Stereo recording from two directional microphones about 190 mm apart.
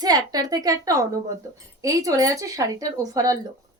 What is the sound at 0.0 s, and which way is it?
Speech, 20° right (ahead or behind).